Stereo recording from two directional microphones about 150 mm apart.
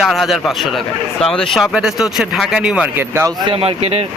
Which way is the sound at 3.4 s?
40° right (ahead or behind).